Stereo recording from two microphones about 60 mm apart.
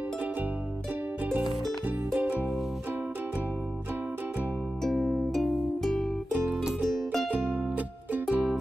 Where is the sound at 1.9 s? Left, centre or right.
Right.